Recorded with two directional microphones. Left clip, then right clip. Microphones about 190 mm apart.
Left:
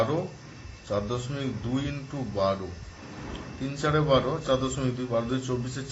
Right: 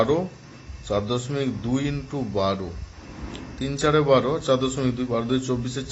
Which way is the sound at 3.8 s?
45° right (ahead or behind).